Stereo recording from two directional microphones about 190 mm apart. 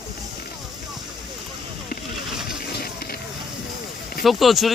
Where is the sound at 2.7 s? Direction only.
55° left (ahead or behind).